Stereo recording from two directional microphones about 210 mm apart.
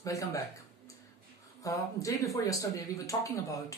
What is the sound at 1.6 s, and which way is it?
Speech, 15° left (ahead or behind).